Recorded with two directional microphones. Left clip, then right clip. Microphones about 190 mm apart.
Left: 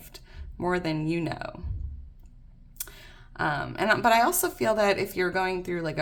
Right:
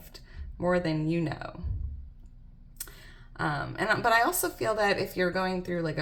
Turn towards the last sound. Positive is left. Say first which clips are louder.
# left 2 dB
turn(degrees=30)  # may be behind; listen again after turning